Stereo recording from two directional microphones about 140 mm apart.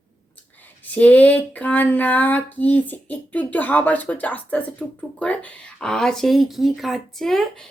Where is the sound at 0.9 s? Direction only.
10° left (ahead or behind).